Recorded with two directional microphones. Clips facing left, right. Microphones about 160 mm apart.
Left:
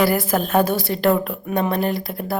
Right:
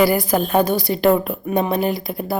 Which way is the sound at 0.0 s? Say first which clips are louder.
Right 2 dB; centre (ahead or behind).